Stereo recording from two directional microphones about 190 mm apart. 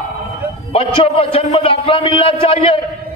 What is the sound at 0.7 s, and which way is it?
A man's voice, 30° left (ahead or behind).